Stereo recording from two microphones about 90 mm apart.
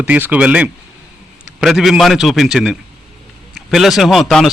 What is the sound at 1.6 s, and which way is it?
A man's voice, 5° right (ahead or behind).